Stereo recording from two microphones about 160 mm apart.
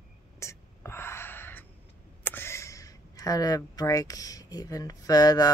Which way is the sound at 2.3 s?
15° left (ahead or behind).